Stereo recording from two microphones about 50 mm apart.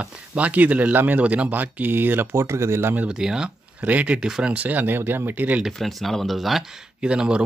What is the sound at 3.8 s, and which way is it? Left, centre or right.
Speech, right.